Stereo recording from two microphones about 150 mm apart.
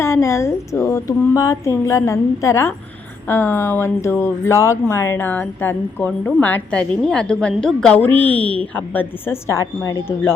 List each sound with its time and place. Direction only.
0.0 s a woman's voice: 20° left (ahead or behind)